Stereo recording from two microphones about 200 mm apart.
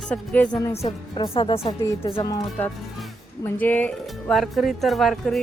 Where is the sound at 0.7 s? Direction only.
30° left (ahead or behind).